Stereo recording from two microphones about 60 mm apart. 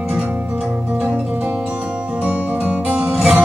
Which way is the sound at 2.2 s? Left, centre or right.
Right.